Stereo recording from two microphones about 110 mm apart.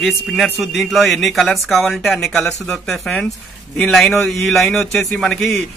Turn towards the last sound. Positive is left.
turn(degrees=0)  # may be behind; listen again after turning